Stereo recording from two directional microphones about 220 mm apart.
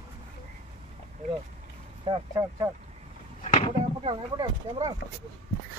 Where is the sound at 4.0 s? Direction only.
25° right (ahead or behind).